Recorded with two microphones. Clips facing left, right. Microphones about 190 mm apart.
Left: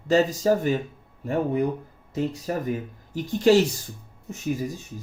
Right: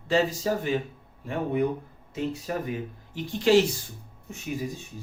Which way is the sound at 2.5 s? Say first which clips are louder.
Left 3 dB; 40° left (ahead or behind).